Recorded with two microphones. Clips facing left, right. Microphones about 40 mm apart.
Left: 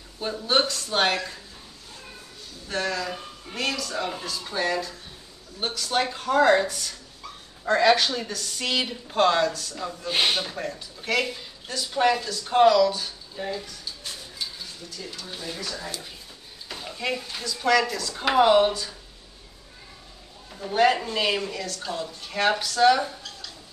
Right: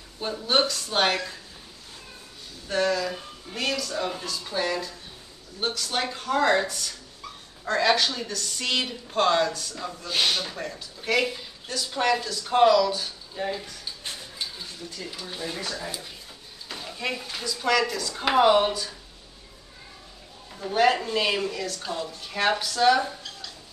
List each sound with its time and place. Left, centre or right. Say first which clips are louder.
0.2 s speech: even; centre
2.7 s speech: right 3 dB; centre
10.0 s speech: left 1 dB; left
10.4 s speech: left 2 dB; centre
14.4 s a sound: even; right
15.0 s speech: right 2 dB; centre
16.8 s speech: left 2 dB; centre
20.6 s speech: left 1 dB; centre